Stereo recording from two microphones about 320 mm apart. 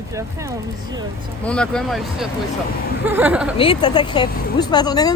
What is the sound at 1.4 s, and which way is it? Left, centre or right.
Speech, centre.